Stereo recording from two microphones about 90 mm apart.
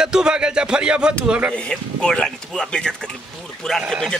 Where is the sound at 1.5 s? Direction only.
10° left (ahead or behind).